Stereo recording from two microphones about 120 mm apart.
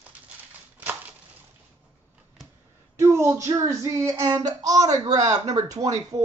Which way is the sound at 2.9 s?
25° right (ahead or behind).